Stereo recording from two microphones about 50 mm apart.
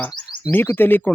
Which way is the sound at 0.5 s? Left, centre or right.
Left.